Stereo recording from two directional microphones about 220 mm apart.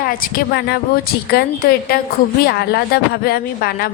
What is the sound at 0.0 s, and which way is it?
A woman's voice, 40° left (ahead or behind).